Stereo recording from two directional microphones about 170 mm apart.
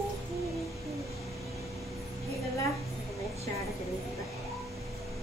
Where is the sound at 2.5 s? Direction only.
20° left (ahead or behind).